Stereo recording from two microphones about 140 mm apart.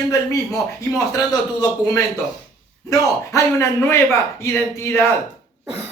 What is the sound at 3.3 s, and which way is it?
Speech, 20° left (ahead or behind).